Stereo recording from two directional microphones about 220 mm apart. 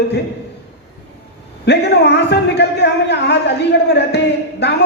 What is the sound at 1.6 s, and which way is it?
A man's voice, 50° left (ahead or behind).